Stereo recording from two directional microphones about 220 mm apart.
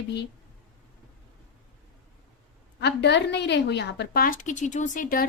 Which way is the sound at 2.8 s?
50° left (ahead or behind).